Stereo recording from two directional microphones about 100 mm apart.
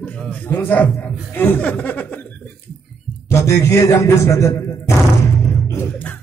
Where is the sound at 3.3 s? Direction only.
30° left (ahead or behind).